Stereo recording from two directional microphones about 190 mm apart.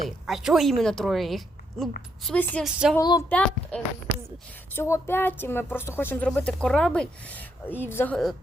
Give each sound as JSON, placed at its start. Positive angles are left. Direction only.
{"t": 0.3, "sound": "a woman's voice", "side_deg": 0}
{"t": 2.6, "sound": "speech", "side_deg": -5}
{"t": 3.0, "sound": "speech", "side_deg": 20}
{"t": 3.2, "sound": "a woman's voice", "side_deg": 5}